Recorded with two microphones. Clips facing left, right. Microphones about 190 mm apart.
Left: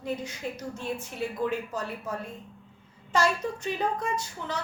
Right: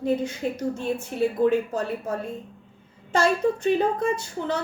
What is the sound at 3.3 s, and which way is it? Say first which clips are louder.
Speech: right 8 dB; 55° right (ahead or behind).